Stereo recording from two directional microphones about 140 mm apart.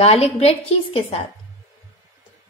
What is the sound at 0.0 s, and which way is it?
A woman's voice, 45° left (ahead or behind).